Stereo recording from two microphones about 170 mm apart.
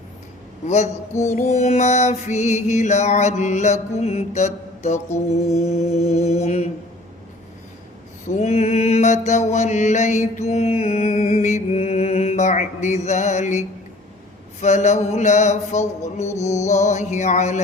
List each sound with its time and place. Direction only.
1.2 s music: 45° left (ahead or behind)
5.3 s mantra: 40° left (ahead or behind)
8.4 s mantra: 40° left (ahead or behind)
14.6 s music: 45° left (ahead or behind)